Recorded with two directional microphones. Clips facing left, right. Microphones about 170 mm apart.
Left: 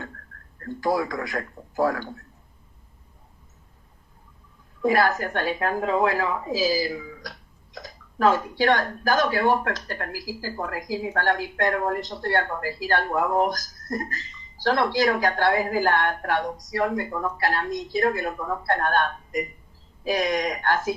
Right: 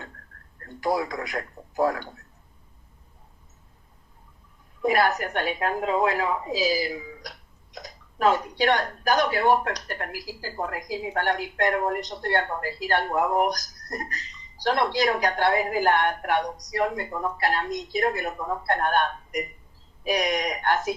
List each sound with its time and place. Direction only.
0.8 s a woman's voice: 20° right (ahead or behind)
4.8 s a woman's voice: 20° right (ahead or behind)